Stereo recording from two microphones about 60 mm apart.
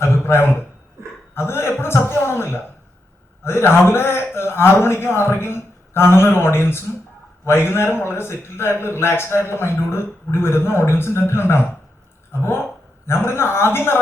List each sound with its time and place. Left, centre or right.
0.0 s a man's voice: left